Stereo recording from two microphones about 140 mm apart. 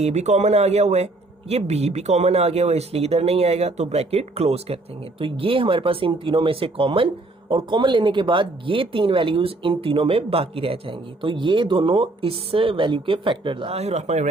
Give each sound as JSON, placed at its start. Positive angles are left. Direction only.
{"t": 0.0, "sound": "speech", "side_deg": -50}